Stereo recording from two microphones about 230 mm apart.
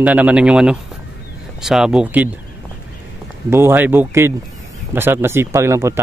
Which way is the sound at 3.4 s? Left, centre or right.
Centre.